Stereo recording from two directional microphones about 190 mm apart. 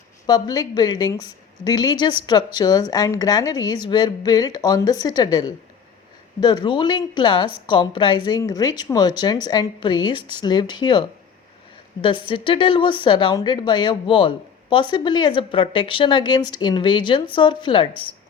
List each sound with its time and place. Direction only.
0.3 s a woman's voice: 20° left (ahead or behind)
12.0 s a woman's voice: 25° left (ahead or behind)